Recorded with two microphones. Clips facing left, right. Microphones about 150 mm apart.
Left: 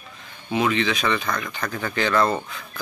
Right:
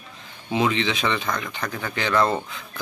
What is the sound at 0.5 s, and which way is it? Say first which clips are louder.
Speech: left 1 dB; 25° right (ahead or behind).